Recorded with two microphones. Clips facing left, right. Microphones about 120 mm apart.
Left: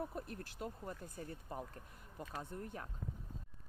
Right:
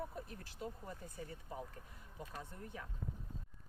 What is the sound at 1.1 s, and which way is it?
Speech, 45° left (ahead or behind).